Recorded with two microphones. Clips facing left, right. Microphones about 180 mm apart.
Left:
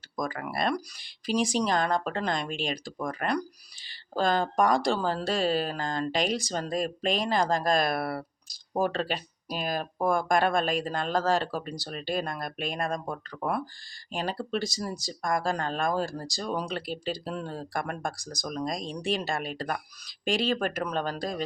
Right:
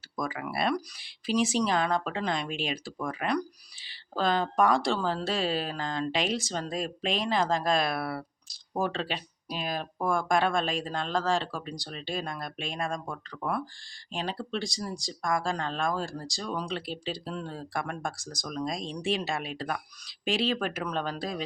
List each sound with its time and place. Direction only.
0.2 s speech: 5° right (ahead or behind)
7.9 s speech: 50° left (ahead or behind)
8.8 s speech: centre (ahead or behind)
14.1 s speech: centre (ahead or behind)